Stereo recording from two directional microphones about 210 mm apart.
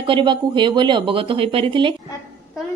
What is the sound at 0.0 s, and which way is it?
Speech, 25° right (ahead or behind).